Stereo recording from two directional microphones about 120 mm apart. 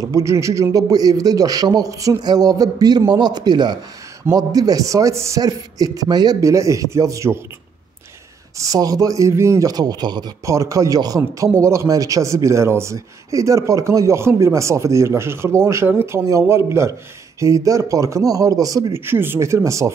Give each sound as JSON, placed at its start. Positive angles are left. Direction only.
{"t": 0.0, "sound": "a man's voice", "side_deg": -25}
{"t": 8.5, "sound": "a man's voice", "side_deg": -30}
{"t": 10.4, "sound": "a man's voice", "side_deg": -25}
{"t": 18.9, "sound": "a man's voice", "side_deg": -20}